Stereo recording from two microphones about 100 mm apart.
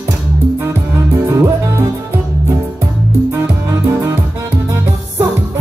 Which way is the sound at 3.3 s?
25° right (ahead or behind).